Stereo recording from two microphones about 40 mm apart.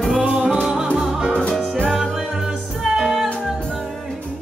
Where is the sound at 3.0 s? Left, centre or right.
Centre.